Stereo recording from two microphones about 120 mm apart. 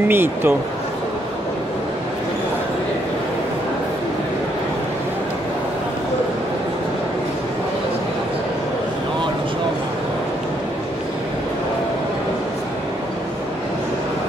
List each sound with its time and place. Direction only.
0.1 s speech: 20° right (ahead or behind)